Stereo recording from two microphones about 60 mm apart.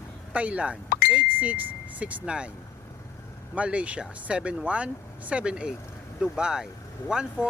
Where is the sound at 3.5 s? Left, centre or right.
Right.